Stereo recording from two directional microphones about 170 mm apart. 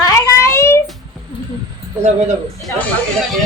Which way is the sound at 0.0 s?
20° left (ahead or behind).